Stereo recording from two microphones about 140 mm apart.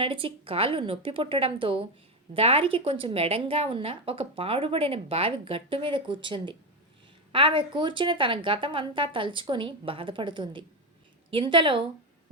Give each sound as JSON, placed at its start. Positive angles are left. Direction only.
{"t": 0.0, "sound": "a woman's voice", "side_deg": -40}